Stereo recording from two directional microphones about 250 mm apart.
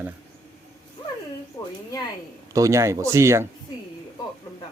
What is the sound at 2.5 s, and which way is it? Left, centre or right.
Speech, centre.